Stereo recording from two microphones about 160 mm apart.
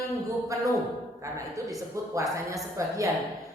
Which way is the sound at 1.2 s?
20° right (ahead or behind).